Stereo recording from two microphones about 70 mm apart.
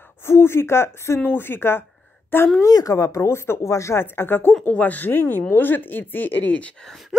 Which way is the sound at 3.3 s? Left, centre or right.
Left.